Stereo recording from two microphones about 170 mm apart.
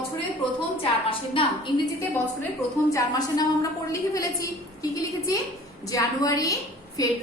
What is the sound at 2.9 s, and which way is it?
A woman's voice, 20° left (ahead or behind).